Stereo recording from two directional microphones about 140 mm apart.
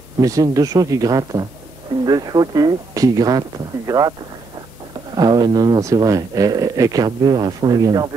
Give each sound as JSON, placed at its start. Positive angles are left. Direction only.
{"t": 0.2, "sound": "speech", "side_deg": -25}
{"t": 5.1, "sound": "speech", "side_deg": -30}